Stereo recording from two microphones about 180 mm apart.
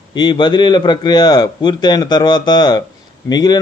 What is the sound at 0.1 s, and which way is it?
A man's voice, 25° left (ahead or behind).